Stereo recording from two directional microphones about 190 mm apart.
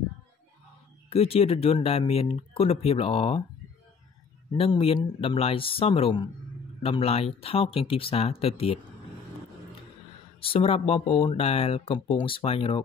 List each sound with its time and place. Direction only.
1.1 s speech: 30° left (ahead or behind)
4.5 s speech: 30° left (ahead or behind)
10.4 s speech: 30° left (ahead or behind)